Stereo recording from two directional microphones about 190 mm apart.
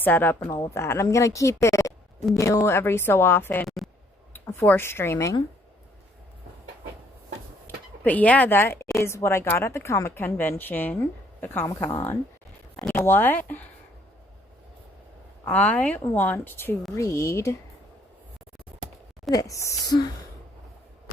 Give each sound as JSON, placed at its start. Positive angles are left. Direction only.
{"t": 0.0, "sound": "speech", "side_deg": 10}
{"t": 8.0, "sound": "speech", "side_deg": 10}
{"t": 15.4, "sound": "speech", "side_deg": 10}
{"t": 19.3, "sound": "speech", "side_deg": 15}